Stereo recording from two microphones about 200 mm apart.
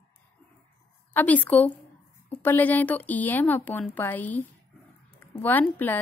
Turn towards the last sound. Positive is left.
turn(degrees=10)  # may be behind; listen again after turning